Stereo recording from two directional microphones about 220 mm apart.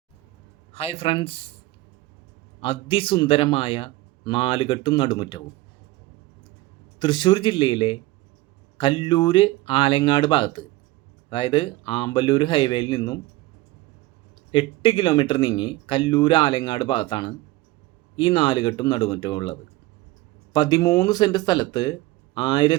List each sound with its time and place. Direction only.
0.7 s speech: 25° left (ahead or behind)
2.6 s speech: 25° left (ahead or behind)
7.0 s speech: 20° left (ahead or behind)
14.5 s speech: 20° left (ahead or behind)